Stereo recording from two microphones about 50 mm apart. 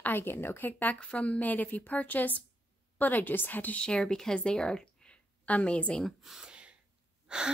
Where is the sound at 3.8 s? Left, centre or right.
Centre.